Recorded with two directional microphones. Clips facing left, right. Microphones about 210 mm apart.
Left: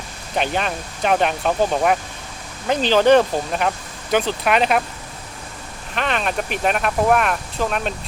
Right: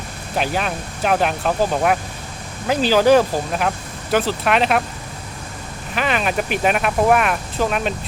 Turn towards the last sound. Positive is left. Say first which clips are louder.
# right 2 dB
turn(degrees=-5)  # may be behind; listen again after turning